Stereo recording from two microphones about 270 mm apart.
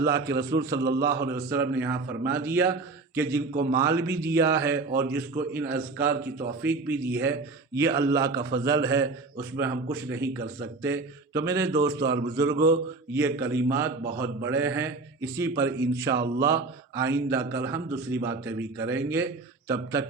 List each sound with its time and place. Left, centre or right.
0.0 s speech: centre
0.8 s a man's voice: right
1.3 s speech: centre
3.5 s a man's voice: right
3.8 s speech: centre